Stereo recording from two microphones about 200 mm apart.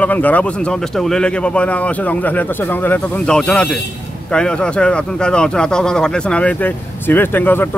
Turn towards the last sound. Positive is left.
turn(degrees=10)  # may be behind; listen again after turning